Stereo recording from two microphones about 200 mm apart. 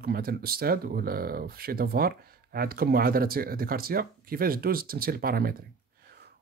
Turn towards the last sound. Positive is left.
turn(degrees=-50)  # may be behind; listen again after turning